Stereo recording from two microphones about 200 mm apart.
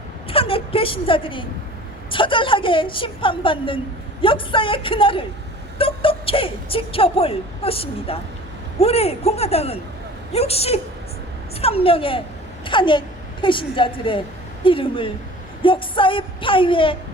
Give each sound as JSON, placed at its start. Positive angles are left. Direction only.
{"t": 0.3, "sound": "a woman's voice", "side_deg": 25}